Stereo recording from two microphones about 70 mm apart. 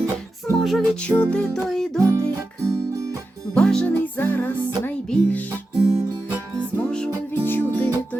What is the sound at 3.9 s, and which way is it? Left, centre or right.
Music, left.